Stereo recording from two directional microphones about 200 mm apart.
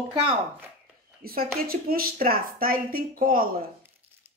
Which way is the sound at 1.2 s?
50° right (ahead or behind).